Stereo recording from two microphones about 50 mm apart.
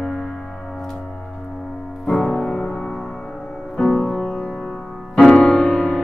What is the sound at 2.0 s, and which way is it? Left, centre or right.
Music, centre.